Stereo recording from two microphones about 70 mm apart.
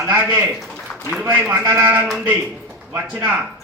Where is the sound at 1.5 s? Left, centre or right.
Right.